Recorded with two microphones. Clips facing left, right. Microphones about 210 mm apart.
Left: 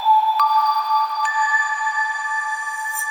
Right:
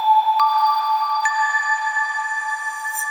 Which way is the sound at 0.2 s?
Centre (ahead or behind).